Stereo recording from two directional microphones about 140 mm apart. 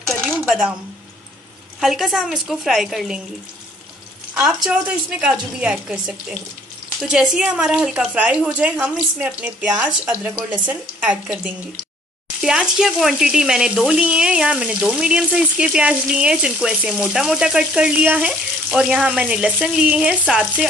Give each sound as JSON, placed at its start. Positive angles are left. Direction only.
{"t": 0.4, "sound": "speech", "side_deg": -5}
{"t": 1.8, "sound": "speech", "side_deg": 0}
{"t": 4.3, "sound": "a woman's voice", "side_deg": -5}